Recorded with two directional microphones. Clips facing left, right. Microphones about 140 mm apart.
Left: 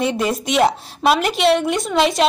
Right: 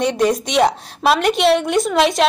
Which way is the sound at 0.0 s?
Centre (ahead or behind).